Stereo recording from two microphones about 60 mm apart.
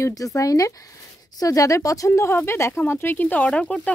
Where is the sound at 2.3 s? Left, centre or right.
Left; by 3.9 s centre.